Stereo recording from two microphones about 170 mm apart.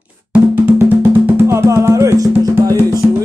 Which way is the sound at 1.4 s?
15° right (ahead or behind).